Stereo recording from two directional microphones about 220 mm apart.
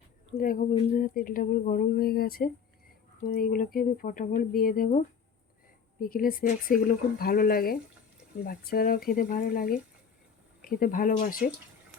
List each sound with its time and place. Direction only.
0.3 s speech: 40° left (ahead or behind)
6.0 s speech: 40° left (ahead or behind)